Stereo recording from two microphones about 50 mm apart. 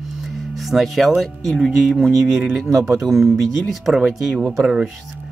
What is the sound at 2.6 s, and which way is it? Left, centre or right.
Speech, right.